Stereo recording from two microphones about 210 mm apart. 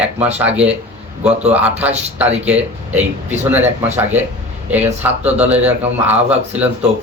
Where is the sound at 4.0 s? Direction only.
10° right (ahead or behind).